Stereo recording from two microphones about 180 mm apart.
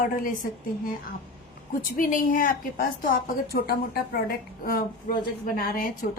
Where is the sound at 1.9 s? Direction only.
50° left (ahead or behind).